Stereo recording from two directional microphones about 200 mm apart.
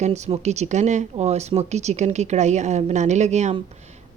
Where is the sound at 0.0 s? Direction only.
35° right (ahead or behind).